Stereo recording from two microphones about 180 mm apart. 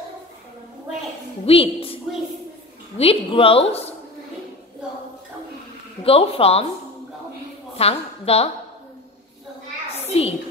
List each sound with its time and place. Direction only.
1.4 s a woman's voice: 30° left (ahead or behind)
3.0 s a woman's voice: 30° left (ahead or behind)
6.0 s a woman's voice: 30° left (ahead or behind)
7.7 s a woman's voice: 35° left (ahead or behind)
9.9 s a sound: 35° left (ahead or behind)